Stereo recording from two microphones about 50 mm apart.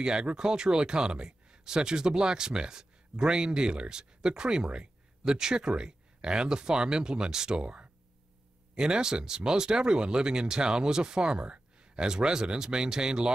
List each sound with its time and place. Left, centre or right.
0.0 s speech: centre